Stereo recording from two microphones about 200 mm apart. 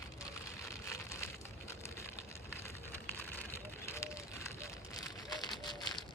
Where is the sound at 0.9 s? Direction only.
15° left (ahead or behind).